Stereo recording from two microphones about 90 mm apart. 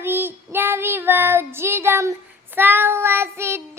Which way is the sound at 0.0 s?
25° right (ahead or behind).